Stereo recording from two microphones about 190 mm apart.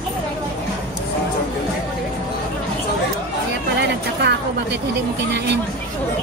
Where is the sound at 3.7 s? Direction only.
65° right (ahead or behind).